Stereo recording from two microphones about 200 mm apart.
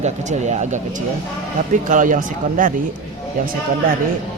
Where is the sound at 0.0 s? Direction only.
35° right (ahead or behind).